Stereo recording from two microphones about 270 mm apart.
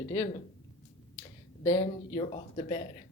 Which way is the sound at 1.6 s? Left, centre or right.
Centre.